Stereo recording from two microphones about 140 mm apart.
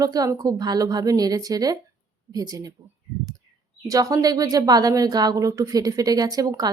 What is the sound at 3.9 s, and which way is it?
Speech, 25° right (ahead or behind).